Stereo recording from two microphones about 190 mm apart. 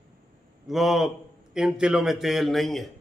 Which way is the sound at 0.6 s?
Centre (ahead or behind).